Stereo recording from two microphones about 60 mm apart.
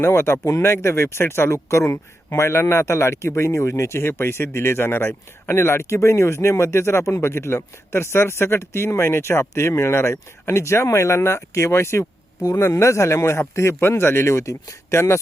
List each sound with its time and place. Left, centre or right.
0.0 s speech: left
0.4 s speech: left
0.7 s speech: left
12.4 s speech: left
12.6 s speech: left